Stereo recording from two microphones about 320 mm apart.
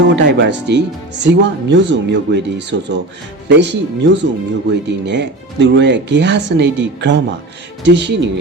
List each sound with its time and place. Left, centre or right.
0.0 s speech: right